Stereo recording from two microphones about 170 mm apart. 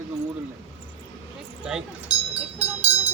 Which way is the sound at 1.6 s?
5° right (ahead or behind).